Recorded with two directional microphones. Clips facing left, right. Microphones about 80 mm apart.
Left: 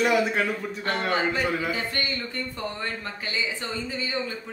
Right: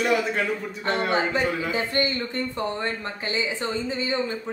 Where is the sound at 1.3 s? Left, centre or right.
Centre.